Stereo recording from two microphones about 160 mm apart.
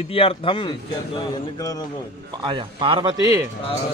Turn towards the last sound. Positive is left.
turn(degrees=-20)  # may be behind; listen again after turning